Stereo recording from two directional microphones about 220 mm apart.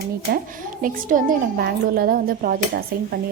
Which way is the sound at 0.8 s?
40° right (ahead or behind).